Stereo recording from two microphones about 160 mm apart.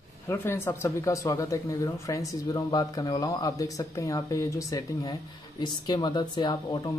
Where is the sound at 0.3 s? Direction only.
15° left (ahead or behind).